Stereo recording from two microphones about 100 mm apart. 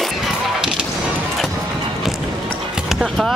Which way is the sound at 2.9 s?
Centre (ahead or behind).